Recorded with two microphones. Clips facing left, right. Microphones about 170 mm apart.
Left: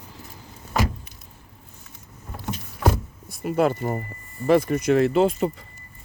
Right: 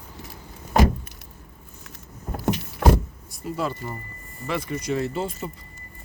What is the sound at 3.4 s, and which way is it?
Speech, 60° left (ahead or behind).